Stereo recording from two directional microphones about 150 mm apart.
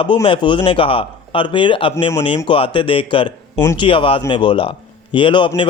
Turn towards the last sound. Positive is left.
turn(degrees=35)  # may be behind; listen again after turning